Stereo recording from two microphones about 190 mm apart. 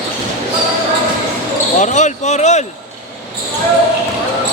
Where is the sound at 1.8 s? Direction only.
40° left (ahead or behind).